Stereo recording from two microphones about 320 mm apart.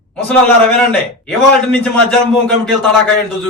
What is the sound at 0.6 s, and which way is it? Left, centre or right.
A man's voice, centre.